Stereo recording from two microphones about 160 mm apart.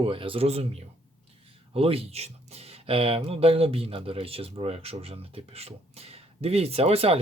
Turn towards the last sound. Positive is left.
turn(degrees=-40)  # may be behind; listen again after turning